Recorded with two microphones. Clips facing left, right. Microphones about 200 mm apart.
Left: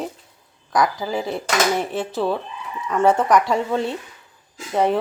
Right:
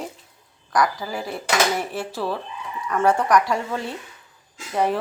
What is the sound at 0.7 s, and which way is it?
Speech, 25° left (ahead or behind).